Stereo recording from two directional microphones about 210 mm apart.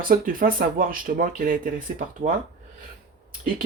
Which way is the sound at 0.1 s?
40° right (ahead or behind).